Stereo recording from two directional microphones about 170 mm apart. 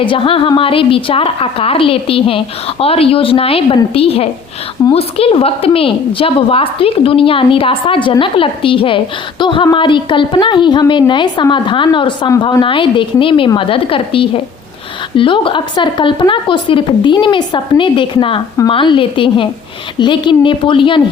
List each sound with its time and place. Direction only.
0.0 s a woman's voice: 30° left (ahead or behind)